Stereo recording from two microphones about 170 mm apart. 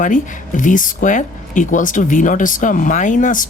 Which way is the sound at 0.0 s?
50° left (ahead or behind).